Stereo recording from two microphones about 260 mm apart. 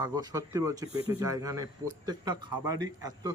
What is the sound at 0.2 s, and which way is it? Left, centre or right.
A man's voice, centre.